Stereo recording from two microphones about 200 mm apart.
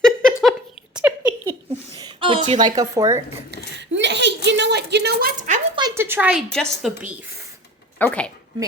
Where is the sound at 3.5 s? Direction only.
60° right (ahead or behind).